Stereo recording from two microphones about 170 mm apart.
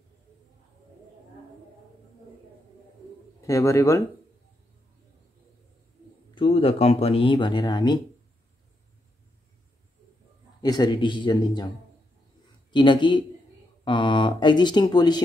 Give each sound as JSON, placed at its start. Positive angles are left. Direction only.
{"t": 3.4, "sound": "speech", "side_deg": 20}
{"t": 6.3, "sound": "speech", "side_deg": 35}
{"t": 10.6, "sound": "speech", "side_deg": 25}
{"t": 12.7, "sound": "speech", "side_deg": 25}